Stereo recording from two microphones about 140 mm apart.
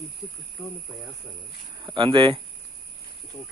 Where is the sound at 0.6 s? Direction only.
20° left (ahead or behind).